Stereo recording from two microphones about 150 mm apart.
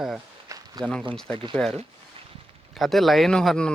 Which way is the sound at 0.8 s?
5° left (ahead or behind).